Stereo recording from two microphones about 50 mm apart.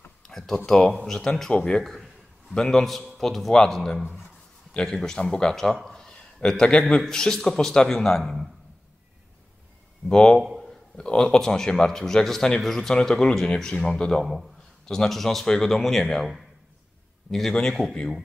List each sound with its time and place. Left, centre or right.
0.2 s a sound: centre
0.7 s a man's voice: centre
1.8 s a man's voice: centre
5.9 s a sound: centre
7.1 s a man's voice: centre
10.0 s a man's voice: centre
10.6 s a sound: centre
11.1 s a man's voice: centre
14.2 s a man's voice: centre
17.3 s a man's voice: centre